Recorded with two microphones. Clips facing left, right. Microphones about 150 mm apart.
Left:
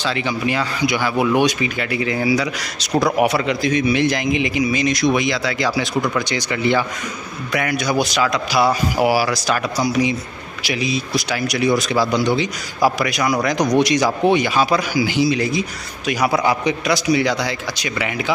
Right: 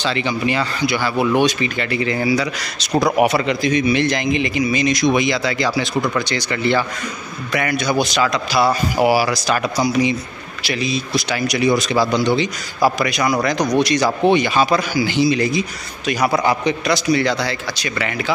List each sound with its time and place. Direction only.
0.0 s speech: 5° left (ahead or behind)
0.8 s speech: 15° left (ahead or behind)